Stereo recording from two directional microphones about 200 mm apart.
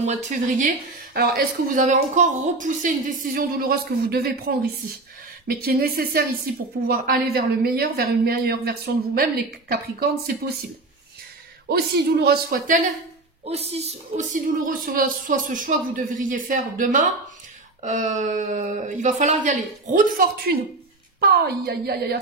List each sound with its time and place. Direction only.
0.0 s speech: 35° right (ahead or behind); by 10.3 s 50° right (ahead or behind)
11.7 s speech: 50° right (ahead or behind)
13.5 s speech: 30° right (ahead or behind)
20.2 s speech: 50° right (ahead or behind)